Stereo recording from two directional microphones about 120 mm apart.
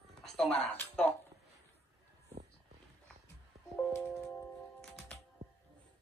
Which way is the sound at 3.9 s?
20° left (ahead or behind).